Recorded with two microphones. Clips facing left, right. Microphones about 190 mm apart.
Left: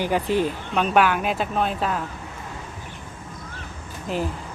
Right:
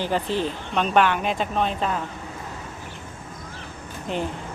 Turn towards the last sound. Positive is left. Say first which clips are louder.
# left 1 dB
turn(degrees=5)  # may be behind; listen again after turning